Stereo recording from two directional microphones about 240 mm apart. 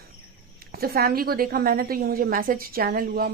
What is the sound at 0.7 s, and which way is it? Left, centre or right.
A woman's voice, right.